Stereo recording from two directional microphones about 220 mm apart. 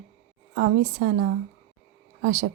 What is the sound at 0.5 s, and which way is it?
Speech, 45° right (ahead or behind).